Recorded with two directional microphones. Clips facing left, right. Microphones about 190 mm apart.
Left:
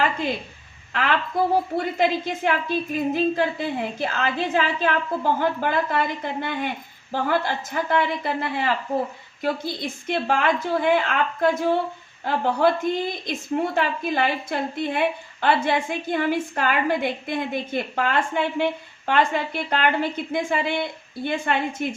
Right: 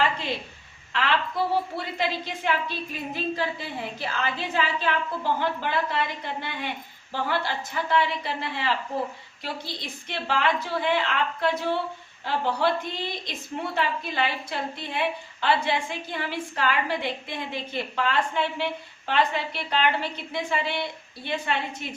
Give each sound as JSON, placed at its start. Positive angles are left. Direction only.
{"t": 1.7, "sound": "a woman's voice", "side_deg": 50}